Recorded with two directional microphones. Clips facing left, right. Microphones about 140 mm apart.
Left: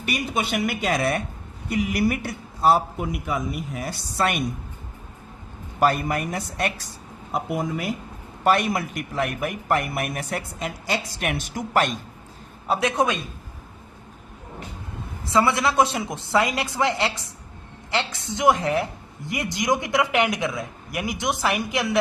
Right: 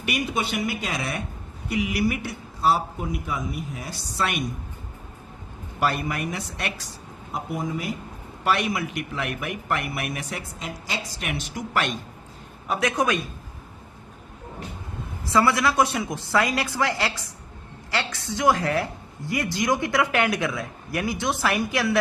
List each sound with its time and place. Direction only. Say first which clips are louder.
0.0 s speech: left 1 dB; 40° left (ahead or behind)
0.5 s speech: left 4 dB; 60° left (ahead or behind)
3.8 s speech: left 4 dB; 50° left (ahead or behind)
5.8 s speech: left 4 dB; 45° left (ahead or behind)
8.4 s speech: left 3 dB; 45° left (ahead or behind)
12.6 s speech: left 2 dB; 30° left (ahead or behind)
15.3 s speech: even; 20° left (ahead or behind)